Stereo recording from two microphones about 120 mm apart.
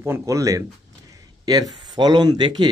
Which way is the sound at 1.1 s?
30° right (ahead or behind).